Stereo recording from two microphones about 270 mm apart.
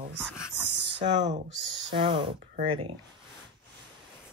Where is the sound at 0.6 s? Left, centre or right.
Left.